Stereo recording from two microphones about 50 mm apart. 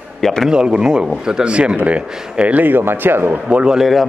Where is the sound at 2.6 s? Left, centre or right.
Right.